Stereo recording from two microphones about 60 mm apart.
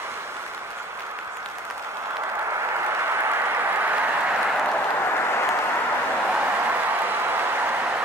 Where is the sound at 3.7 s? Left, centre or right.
Right.